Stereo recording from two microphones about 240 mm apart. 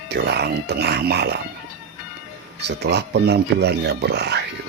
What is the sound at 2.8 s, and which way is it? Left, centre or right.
Speech, right.